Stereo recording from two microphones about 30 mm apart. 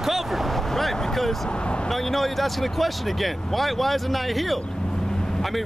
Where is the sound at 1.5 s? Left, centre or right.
Left.